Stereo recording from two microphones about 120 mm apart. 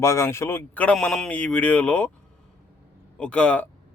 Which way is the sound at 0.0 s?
25° left (ahead or behind).